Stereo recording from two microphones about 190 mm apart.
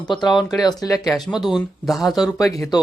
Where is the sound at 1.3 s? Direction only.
Centre (ahead or behind).